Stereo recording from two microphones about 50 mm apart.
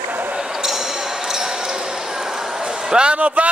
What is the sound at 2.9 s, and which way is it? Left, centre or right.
Speech, centre.